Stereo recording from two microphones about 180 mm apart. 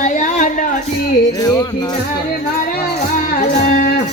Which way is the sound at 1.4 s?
20° left (ahead or behind).